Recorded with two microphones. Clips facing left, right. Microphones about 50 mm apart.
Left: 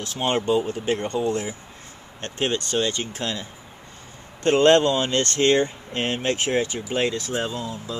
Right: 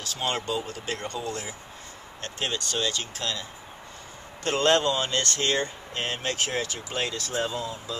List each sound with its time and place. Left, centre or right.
0.0 s speech: left
2.2 s speech: left